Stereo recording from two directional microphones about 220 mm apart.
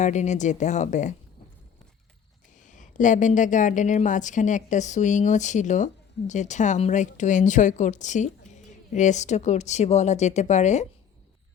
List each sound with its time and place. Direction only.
0.0 s a woman's voice: 30° left (ahead or behind)
2.6 s a woman's voice: 35° left (ahead or behind)